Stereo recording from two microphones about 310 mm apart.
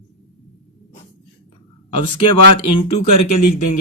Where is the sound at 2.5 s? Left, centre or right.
Left.